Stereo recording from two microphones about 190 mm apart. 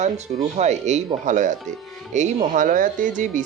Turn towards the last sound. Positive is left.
turn(degrees=-40)  # may be behind; listen again after turning